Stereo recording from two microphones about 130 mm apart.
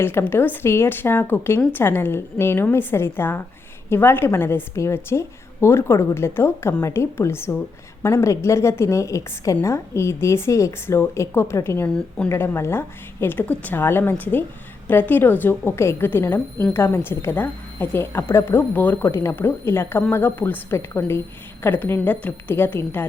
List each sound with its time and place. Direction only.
0.0 s a woman's voice: 20° left (ahead or behind)
11.9 s a woman's voice: 5° left (ahead or behind)
12.3 s a woman's voice: 20° left (ahead or behind)